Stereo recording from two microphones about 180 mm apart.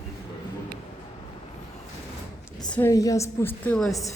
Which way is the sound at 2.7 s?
10° left (ahead or behind).